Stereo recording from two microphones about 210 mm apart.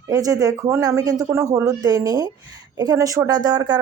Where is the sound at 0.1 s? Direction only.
15° right (ahead or behind).